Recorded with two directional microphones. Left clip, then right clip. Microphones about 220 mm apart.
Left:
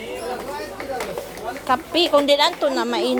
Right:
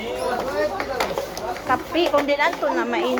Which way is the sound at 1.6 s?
45° left (ahead or behind).